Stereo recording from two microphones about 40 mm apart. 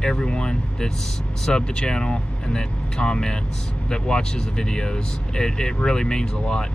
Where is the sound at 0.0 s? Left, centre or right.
Centre.